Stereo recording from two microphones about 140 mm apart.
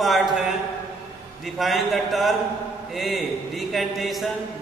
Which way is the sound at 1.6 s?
Centre (ahead or behind).